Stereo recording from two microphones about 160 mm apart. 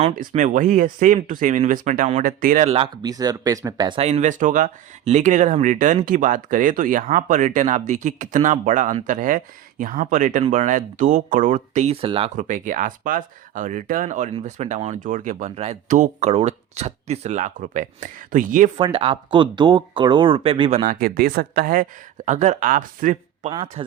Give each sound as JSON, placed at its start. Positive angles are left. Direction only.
{"t": 0.2, "sound": "speech", "side_deg": -50}
{"t": 2.6, "sound": "speech", "side_deg": -35}
{"t": 4.0, "sound": "speech", "side_deg": -45}
{"t": 12.4, "sound": "speech", "side_deg": -50}
{"t": 18.8, "sound": "speech", "side_deg": -30}
{"t": 20.8, "sound": "speech", "side_deg": -60}
{"t": 22.3, "sound": "speech", "side_deg": -50}
{"t": 23.5, "sound": "speech", "side_deg": -30}